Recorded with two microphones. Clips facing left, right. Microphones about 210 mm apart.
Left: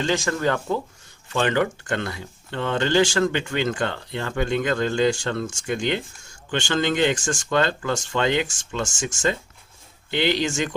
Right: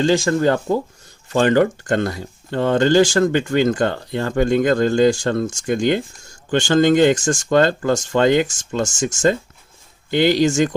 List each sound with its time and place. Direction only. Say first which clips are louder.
0.0 s speech: right 7 dB; 35° right (ahead or behind)